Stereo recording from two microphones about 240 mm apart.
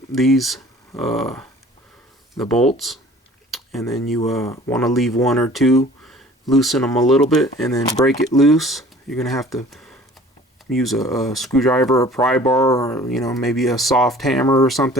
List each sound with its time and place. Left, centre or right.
0.1 s speech: centre
3.5 s a sound: centre
3.9 s speech: centre
8.0 s speech: centre
8.4 s speech: centre
12.6 s speech: centre
13.1 s speech: centre
14.4 s speech: centre
14.7 s speech: centre